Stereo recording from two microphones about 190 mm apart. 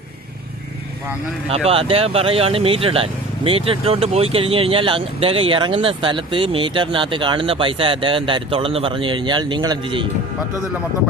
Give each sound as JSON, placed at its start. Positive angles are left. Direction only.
{"t": 1.5, "sound": "speech", "side_deg": -30}